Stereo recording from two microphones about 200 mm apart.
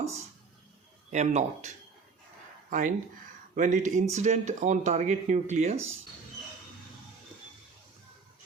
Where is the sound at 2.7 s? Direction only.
40° right (ahead or behind).